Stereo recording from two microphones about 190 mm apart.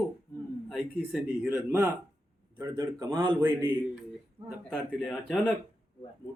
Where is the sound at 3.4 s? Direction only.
10° right (ahead or behind).